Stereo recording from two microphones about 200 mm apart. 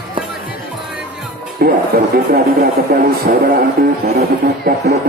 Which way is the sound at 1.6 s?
50° right (ahead or behind).